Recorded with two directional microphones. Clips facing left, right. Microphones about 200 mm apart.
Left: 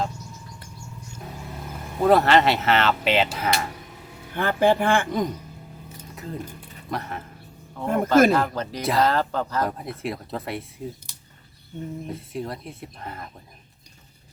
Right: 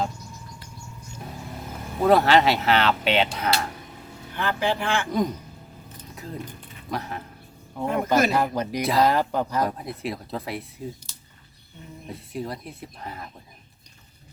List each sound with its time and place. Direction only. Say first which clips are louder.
2.0 s speech: even; centre (ahead or behind)
4.4 s speech: left 5 dB; 50° left (ahead or behind)
5.0 s speech: right 1 dB; centre (ahead or behind)
7.9 s speech: left 2 dB; 50° left (ahead or behind)
8.3 s speech: left 1 dB; 10° right (ahead or behind)
8.8 s speech: even; centre (ahead or behind)
9.0 s speech: right 1 dB; 15° right (ahead or behind)
9.6 s speech: even; centre (ahead or behind)
11.1 s a sound: even; 15° left (ahead or behind)
12.0 s speech: left 1 dB; centre (ahead or behind)